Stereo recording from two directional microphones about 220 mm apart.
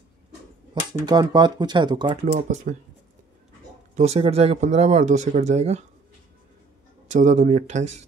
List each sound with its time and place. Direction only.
1.0 s speech: 20° right (ahead or behind)
2.5 s speech: 35° right (ahead or behind)
3.9 s speech: 30° right (ahead or behind)
7.1 s speech: 30° right (ahead or behind)